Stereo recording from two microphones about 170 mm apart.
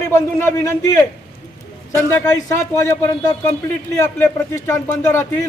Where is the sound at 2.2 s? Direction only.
15° left (ahead or behind).